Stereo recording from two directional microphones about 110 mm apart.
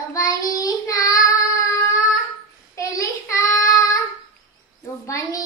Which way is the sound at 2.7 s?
30° left (ahead or behind).